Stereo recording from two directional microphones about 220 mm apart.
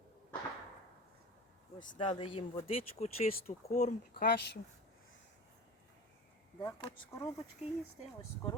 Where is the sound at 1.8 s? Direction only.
35° left (ahead or behind).